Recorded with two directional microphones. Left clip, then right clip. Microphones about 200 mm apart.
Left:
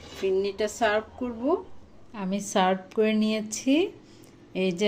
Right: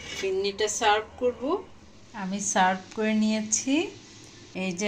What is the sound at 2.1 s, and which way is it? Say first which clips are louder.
A woman's voice: right 1 dB; 50° left (ahead or behind).